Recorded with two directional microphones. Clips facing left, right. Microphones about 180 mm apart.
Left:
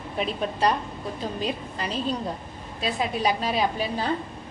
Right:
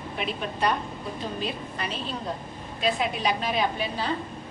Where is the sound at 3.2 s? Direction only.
35° left (ahead or behind).